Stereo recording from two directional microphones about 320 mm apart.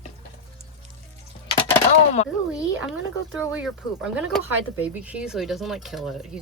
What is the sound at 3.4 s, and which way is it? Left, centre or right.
Speech, centre.